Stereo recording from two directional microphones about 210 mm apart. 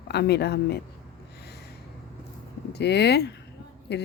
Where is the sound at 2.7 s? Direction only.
55° left (ahead or behind).